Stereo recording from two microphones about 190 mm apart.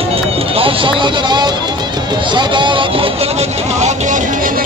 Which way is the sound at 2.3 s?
25° right (ahead or behind).